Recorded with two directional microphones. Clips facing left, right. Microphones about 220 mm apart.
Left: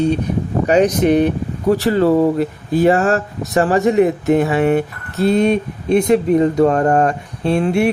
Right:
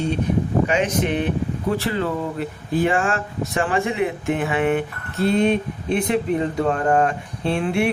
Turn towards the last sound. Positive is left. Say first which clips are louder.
# left 5 dB
turn(degrees=40)  # may be behind; listen again after turning